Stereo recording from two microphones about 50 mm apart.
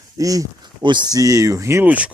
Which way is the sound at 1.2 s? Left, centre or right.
Right.